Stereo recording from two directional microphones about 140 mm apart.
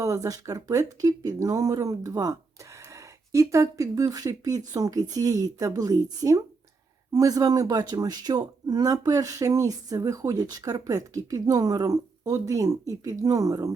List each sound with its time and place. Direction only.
0.0 s speech: 25° right (ahead or behind)